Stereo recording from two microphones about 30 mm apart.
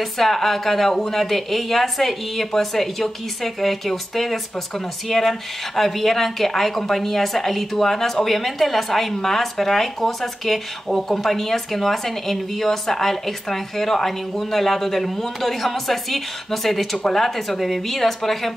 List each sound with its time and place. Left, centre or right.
0.0 s a woman's voice: centre